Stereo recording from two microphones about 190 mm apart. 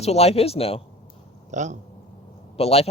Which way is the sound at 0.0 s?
35° left (ahead or behind).